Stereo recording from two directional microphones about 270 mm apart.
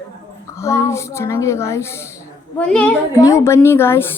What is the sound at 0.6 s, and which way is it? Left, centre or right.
A woman's voice, centre.